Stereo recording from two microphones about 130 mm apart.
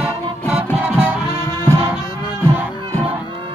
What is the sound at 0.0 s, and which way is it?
Music, 10° right (ahead or behind).